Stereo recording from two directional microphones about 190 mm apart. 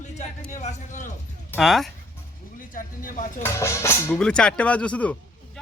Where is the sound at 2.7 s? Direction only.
45° left (ahead or behind).